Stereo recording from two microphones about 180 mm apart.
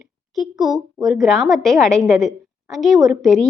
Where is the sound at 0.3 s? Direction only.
Centre (ahead or behind).